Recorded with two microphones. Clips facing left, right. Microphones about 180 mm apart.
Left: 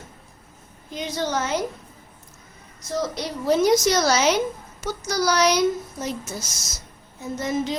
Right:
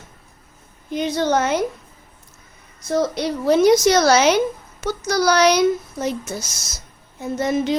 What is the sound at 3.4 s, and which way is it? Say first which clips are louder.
Speech: right 4 dB; 65° right (ahead or behind).